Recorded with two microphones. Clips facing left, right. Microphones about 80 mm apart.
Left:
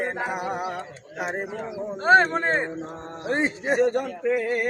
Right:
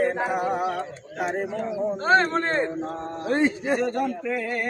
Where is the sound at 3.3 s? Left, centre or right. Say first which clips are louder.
Right 2 dB; left.